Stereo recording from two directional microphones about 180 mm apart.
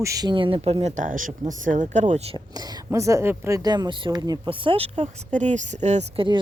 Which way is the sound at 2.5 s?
20° right (ahead or behind).